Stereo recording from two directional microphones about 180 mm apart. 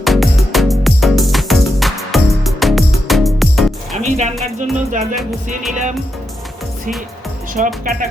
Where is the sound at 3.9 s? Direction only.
40° right (ahead or behind).